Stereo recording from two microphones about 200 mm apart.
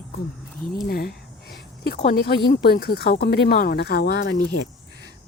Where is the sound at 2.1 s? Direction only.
50° left (ahead or behind).